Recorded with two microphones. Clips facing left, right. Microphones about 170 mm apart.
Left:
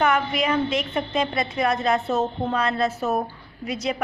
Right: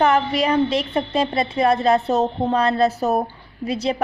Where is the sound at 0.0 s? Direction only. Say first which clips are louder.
Right 4 dB; 35° right (ahead or behind).